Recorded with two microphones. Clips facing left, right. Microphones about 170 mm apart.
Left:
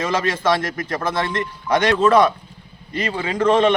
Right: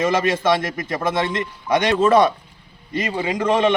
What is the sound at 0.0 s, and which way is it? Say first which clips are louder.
A man's voice: right 2 dB; 20° right (ahead or behind).